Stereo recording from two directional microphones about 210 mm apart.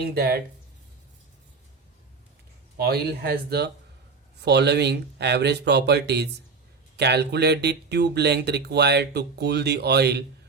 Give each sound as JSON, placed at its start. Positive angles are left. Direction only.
{"t": 0.0, "sound": "speech", "side_deg": -45}
{"t": 2.7, "sound": "speech", "side_deg": -50}